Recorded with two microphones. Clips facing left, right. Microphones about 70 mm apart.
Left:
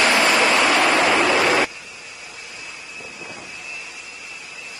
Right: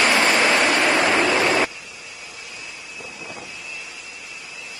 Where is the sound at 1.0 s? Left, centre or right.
Left.